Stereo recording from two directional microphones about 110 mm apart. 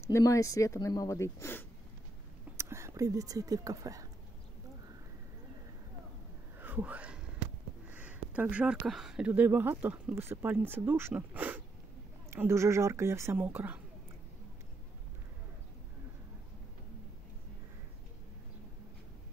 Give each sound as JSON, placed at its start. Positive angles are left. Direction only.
{"t": 0.0, "sound": "speech", "side_deg": 30}
{"t": 2.5, "sound": "speech", "side_deg": -25}
{"t": 6.6, "sound": "speech", "side_deg": -15}
{"t": 7.9, "sound": "a sound", "side_deg": -15}
{"t": 8.8, "sound": "speech", "side_deg": -5}
{"t": 9.3, "sound": "speech", "side_deg": -20}